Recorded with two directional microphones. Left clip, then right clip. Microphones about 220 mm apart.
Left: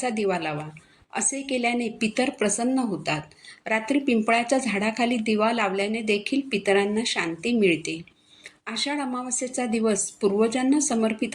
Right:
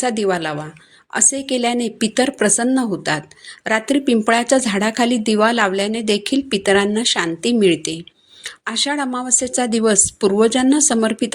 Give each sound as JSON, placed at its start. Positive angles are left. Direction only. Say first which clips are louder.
{"t": 0.0, "sound": "a woman's voice", "louder": "right 7 dB", "side_deg": -40}